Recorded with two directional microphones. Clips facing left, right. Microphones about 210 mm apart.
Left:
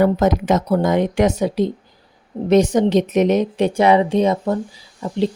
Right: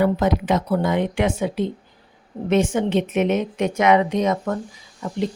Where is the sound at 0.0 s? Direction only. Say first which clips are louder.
Left 3 dB; 45° left (ahead or behind).